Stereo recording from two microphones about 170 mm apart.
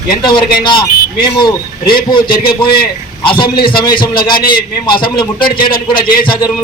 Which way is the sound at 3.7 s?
60° left (ahead or behind).